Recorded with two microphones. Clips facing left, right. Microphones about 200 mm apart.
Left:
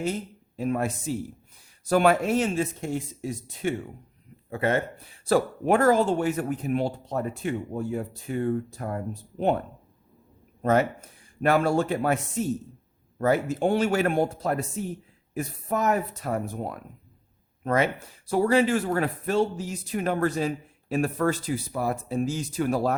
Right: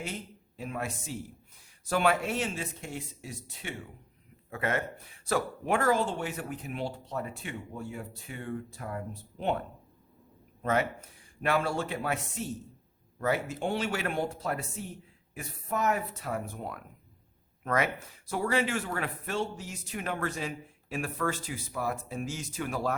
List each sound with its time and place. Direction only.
0.0 s speech: 40° left (ahead or behind)
4.4 s speech: 30° left (ahead or behind)
10.6 s speech: 40° left (ahead or behind)